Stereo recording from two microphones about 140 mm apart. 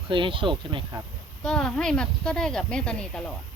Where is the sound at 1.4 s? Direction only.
5° left (ahead or behind).